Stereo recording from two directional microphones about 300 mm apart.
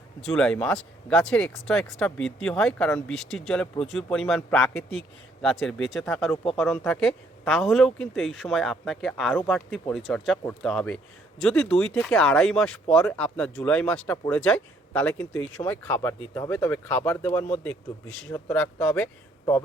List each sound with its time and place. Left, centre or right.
0.2 s speech: centre